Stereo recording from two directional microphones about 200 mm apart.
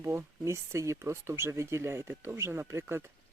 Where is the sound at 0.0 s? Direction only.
15° right (ahead or behind).